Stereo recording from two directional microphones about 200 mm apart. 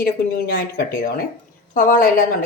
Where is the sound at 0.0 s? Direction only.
50° left (ahead or behind).